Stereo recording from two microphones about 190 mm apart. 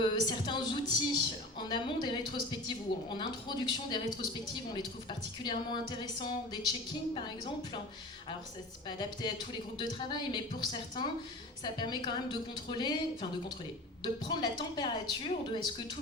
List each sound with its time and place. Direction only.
0.0 s a woman's voice: 25° left (ahead or behind)
9.0 s a woman's voice: 20° left (ahead or behind)
14.0 s a woman's voice: 20° left (ahead or behind)